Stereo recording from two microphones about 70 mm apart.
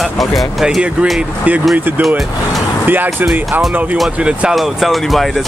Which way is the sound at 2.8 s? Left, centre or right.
Right.